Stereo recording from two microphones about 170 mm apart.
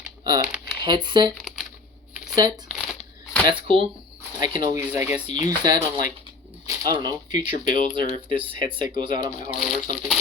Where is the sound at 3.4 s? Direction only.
30° right (ahead or behind).